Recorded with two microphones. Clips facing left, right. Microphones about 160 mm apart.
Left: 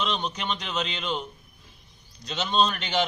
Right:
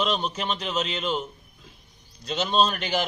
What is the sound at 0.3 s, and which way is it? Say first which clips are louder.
Speech: right 2 dB; 30° right (ahead or behind).